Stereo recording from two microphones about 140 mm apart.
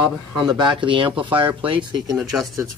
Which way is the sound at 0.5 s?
35° right (ahead or behind).